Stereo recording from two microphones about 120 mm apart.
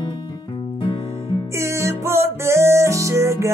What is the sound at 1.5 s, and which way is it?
Music, 25° right (ahead or behind).